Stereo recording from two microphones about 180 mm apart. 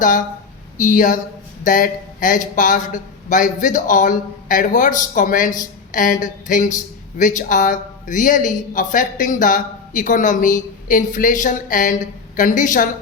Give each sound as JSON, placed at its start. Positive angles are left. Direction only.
{"t": 0.8, "sound": "speech", "side_deg": 45}